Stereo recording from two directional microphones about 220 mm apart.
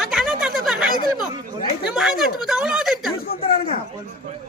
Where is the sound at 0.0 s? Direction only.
Centre (ahead or behind).